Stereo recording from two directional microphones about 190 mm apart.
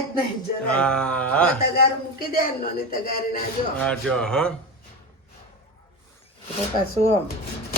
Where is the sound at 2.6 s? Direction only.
50° left (ahead or behind).